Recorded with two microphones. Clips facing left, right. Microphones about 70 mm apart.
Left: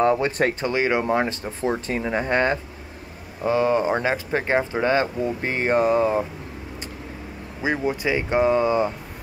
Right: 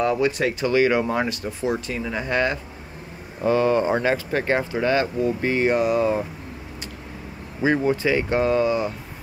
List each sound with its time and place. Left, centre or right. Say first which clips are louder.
0.0 s speech: left 1 dB; left
0.7 s speech: right 6 dB; left
1.3 s speech: even; left
3.4 s speech: right 1 dB; centre
7.6 s speech: right 3 dB; centre; by 8.9 s left